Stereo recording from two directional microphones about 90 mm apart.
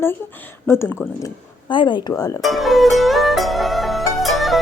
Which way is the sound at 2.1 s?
40° left (ahead or behind).